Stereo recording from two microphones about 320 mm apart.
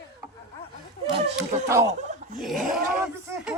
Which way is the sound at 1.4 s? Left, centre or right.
Centre.